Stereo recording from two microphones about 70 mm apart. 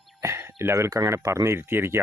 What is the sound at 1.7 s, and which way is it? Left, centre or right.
Speech, right.